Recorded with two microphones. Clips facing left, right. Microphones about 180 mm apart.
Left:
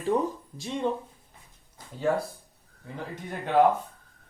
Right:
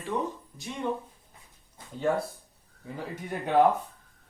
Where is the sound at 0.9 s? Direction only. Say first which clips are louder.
Left 2 dB; 25° left (ahead or behind).